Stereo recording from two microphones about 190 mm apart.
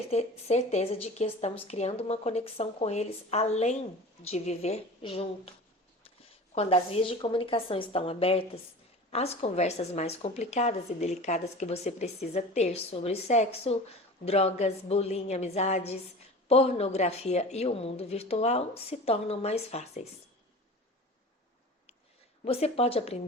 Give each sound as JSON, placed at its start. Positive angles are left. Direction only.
{"t": 0.1, "sound": "a woman's voice", "side_deg": 35}
{"t": 22.4, "sound": "speech", "side_deg": 30}